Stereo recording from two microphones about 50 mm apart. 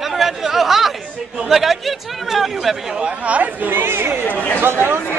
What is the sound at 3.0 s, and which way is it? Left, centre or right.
Speech, right.